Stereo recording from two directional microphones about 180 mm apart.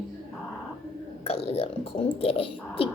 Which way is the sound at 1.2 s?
35° left (ahead or behind).